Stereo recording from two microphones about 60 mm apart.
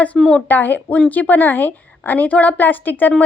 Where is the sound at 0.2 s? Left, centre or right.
Centre.